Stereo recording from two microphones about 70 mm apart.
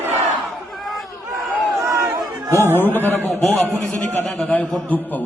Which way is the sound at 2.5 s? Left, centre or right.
Right.